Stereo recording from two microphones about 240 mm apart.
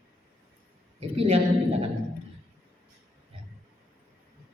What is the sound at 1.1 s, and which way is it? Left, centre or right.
Speech, right.